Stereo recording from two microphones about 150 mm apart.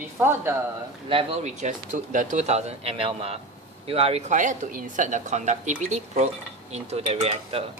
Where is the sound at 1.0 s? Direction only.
40° right (ahead or behind).